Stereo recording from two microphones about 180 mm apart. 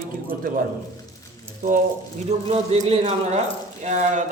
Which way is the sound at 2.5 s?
35° right (ahead or behind).